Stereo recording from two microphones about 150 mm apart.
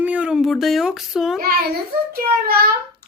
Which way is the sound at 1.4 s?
85° right.